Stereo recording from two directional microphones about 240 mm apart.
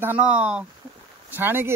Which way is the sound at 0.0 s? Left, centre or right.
Centre.